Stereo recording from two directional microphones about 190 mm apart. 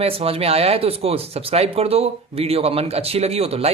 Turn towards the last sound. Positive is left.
turn(degrees=-30)  # may be behind; listen again after turning